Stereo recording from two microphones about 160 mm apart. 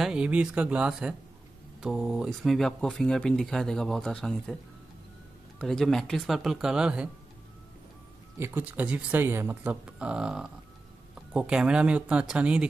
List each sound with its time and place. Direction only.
0.0 s speech: 5° right (ahead or behind)
5.6 s speech: centre (ahead or behind)
8.4 s speech: 10° right (ahead or behind)